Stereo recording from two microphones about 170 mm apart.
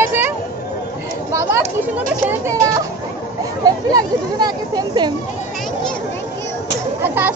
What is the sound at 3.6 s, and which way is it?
Speech, 25° right (ahead or behind).